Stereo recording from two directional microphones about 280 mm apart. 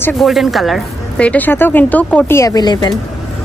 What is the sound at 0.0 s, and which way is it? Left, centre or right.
Speech, centre.